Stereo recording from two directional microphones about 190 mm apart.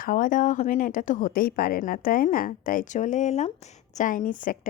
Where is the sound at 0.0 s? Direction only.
45° left (ahead or behind).